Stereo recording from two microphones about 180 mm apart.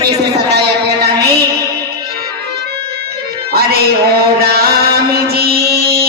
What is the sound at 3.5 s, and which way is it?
Music, 60° right (ahead or behind).